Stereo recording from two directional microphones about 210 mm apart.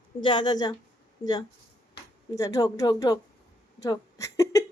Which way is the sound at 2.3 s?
15° left (ahead or behind).